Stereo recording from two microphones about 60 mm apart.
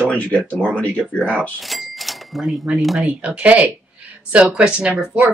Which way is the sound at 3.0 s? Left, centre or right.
Right.